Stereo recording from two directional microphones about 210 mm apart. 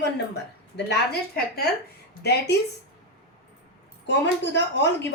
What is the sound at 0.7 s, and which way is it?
Speech, 50° left (ahead or behind).